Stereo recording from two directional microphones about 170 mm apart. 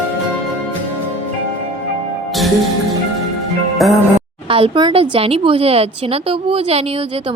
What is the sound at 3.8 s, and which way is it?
Music, centre (ahead or behind).